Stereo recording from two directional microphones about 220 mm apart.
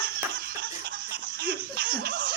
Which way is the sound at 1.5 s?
45° right (ahead or behind).